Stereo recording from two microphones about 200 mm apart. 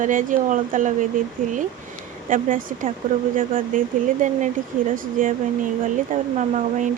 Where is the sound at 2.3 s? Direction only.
45° right (ahead or behind).